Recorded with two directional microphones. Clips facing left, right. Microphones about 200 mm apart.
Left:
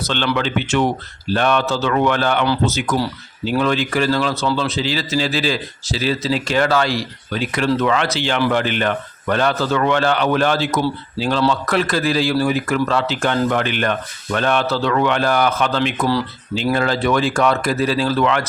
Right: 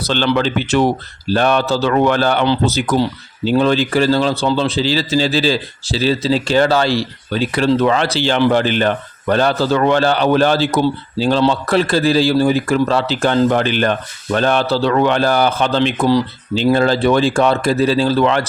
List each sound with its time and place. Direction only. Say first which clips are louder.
0.0 s speech: right 4 dB; 35° right (ahead or behind)